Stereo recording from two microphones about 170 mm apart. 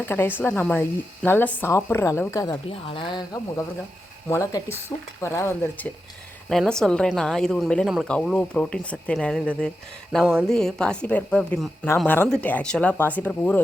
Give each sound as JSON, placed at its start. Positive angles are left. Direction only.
{"t": 0.1, "sound": "a woman's voice", "side_deg": 10}
{"t": 2.6, "sound": "a woman's voice", "side_deg": 30}